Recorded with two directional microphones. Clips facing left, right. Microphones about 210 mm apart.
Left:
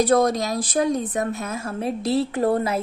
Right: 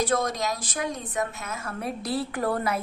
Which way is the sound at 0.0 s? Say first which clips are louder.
Left 7 dB; 35° left (ahead or behind).